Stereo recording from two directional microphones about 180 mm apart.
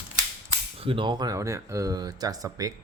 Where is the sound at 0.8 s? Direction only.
30° right (ahead or behind).